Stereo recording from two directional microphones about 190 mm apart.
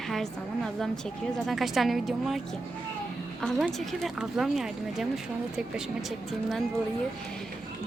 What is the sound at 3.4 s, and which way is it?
A woman's voice, centre (ahead or behind).